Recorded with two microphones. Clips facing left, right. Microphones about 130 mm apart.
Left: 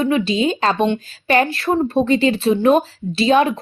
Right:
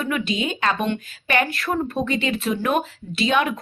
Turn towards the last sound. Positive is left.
turn(degrees=30)  # may be behind; listen again after turning